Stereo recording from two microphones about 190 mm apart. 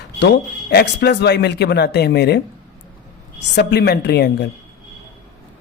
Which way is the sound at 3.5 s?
60° left (ahead or behind).